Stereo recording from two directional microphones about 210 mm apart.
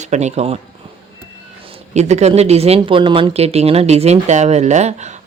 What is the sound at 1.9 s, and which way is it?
Speech, 30° right (ahead or behind).